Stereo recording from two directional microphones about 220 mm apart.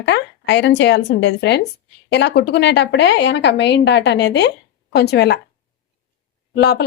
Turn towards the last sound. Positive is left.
turn(degrees=50)  # may be behind; listen again after turning